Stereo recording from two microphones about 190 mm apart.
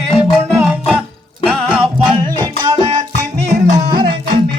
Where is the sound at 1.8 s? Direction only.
20° right (ahead or behind).